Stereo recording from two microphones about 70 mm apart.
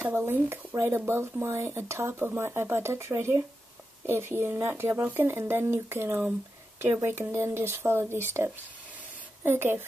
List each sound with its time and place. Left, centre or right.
0.1 s speech: right
9.4 s speech: right